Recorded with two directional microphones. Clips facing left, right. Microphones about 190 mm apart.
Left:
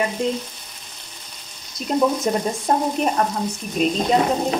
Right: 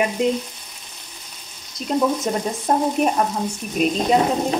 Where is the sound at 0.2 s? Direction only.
20° right (ahead or behind).